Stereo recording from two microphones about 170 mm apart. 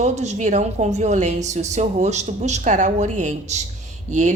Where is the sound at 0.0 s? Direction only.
45° right (ahead or behind).